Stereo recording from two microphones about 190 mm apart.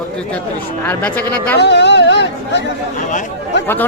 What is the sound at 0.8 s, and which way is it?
Speech, 5° left (ahead or behind).